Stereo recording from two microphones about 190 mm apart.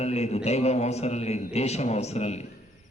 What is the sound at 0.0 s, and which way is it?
A man's voice, 35° left (ahead or behind).